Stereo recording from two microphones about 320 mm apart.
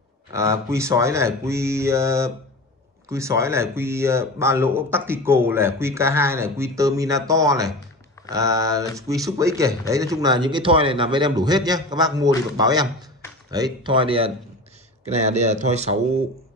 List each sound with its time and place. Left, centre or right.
0.3 s speech: centre